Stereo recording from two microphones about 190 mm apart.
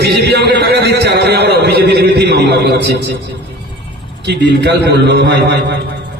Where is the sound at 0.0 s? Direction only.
60° right (ahead or behind).